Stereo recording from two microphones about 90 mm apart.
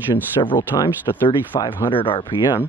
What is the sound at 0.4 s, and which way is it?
Speech, 65° left (ahead or behind).